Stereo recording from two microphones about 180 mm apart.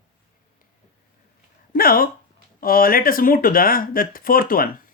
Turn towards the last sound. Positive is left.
turn(degrees=55)  # may be behind; listen again after turning